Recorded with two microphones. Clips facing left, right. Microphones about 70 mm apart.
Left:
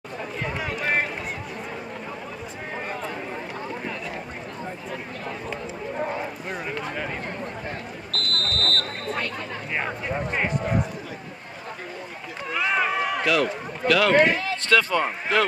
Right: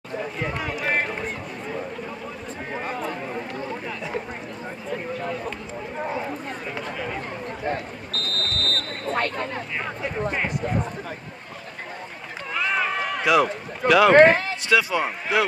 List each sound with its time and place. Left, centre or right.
0.4 s run: centre
8.1 s buzzer: centre
9.1 s a sound: right
12.5 s run: centre
13.2 s speech: centre
14.1 s speech: right
14.7 s speech: centre